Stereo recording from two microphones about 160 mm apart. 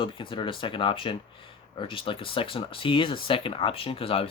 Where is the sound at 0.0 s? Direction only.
30° left (ahead or behind).